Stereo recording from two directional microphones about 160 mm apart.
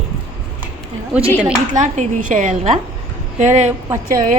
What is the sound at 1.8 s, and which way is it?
A woman's voice, 50° right (ahead or behind).